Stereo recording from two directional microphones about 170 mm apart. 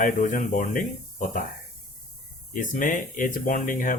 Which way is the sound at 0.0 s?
50° left (ahead or behind).